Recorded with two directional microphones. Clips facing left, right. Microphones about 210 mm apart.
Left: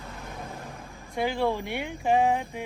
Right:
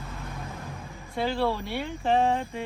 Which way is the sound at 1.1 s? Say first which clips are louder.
Even; 15° left (ahead or behind).